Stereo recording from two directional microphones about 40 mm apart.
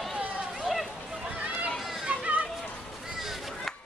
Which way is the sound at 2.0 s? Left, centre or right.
Right.